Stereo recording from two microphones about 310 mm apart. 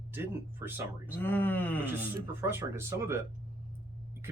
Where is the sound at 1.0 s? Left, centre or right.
Centre.